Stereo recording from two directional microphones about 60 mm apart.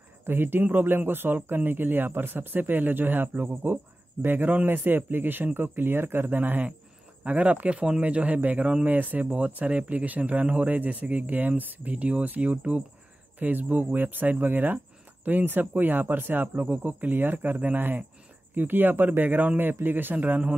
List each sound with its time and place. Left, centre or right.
0.2 s speech: right